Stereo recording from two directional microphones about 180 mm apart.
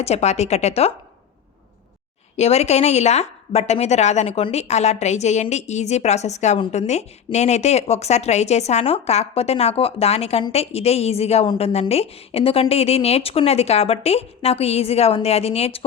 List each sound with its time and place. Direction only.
0.0 s a woman's voice: 35° left (ahead or behind)
2.3 s a woman's voice: 35° left (ahead or behind)